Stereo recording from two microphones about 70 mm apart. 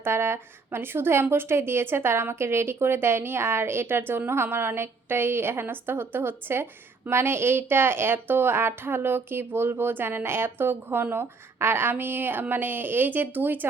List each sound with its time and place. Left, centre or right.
0.0 s a woman's voice: right